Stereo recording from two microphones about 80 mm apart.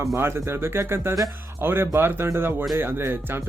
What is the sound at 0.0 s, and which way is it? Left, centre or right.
Speech, right.